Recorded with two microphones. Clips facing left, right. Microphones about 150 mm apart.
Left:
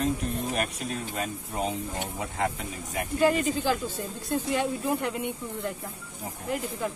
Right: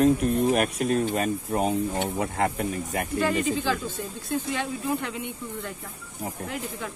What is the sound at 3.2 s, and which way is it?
Speech, 10° left (ahead or behind).